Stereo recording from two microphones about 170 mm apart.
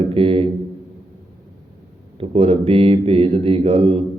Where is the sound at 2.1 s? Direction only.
35° right (ahead or behind).